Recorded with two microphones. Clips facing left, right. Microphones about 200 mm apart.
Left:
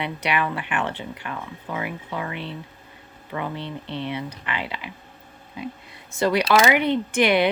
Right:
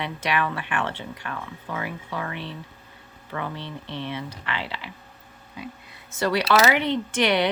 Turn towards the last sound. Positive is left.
turn(degrees=15)  # may be behind; listen again after turning